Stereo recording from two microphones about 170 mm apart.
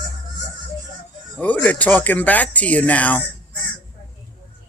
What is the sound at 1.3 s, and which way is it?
Speech, 10° left (ahead or behind).